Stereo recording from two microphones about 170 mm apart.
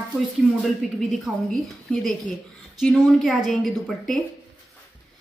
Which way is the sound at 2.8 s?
Centre (ahead or behind).